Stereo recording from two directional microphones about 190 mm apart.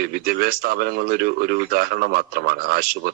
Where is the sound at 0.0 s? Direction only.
50° right (ahead or behind).